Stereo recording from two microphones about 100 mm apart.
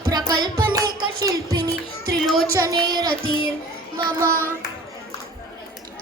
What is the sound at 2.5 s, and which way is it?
Music, 40° right (ahead or behind).